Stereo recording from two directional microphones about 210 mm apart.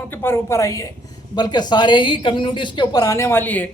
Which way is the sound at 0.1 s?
10° left (ahead or behind).